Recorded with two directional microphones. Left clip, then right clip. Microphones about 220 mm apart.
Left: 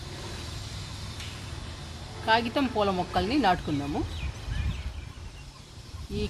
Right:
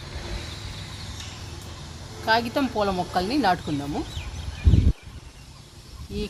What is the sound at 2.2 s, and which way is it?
Speech, 30° right (ahead or behind).